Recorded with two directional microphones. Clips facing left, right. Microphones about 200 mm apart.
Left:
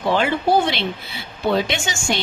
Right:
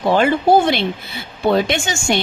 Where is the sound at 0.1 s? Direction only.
45° right (ahead or behind).